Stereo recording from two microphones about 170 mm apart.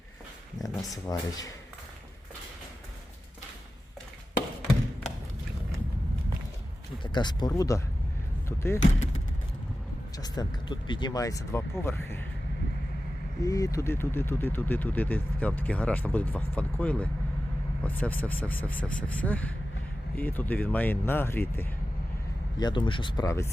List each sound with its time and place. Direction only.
0.8 s speech: 20° left (ahead or behind)
7.0 s speech: 25° left (ahead or behind)
10.2 s speech: 25° left (ahead or behind)
13.4 s speech: 20° left (ahead or behind)
22.5 s speech: 25° left (ahead or behind)